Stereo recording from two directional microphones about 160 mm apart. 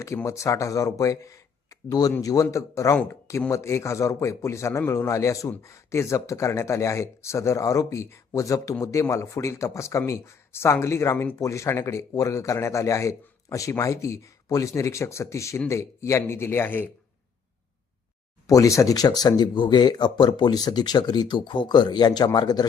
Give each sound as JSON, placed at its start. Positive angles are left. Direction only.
{"t": 0.0, "sound": "speech", "side_deg": 20}
{"t": 18.4, "sound": "speech", "side_deg": 20}